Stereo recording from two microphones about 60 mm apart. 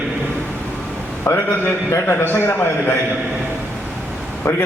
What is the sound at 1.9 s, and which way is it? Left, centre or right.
Speech, left.